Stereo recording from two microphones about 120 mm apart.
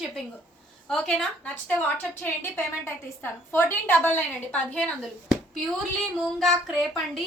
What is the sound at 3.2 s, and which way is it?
A woman's voice, 20° left (ahead or behind).